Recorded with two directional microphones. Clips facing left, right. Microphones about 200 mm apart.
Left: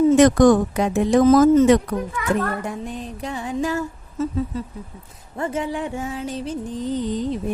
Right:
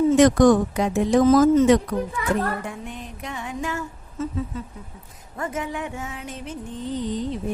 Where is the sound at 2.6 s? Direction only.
35° left (ahead or behind).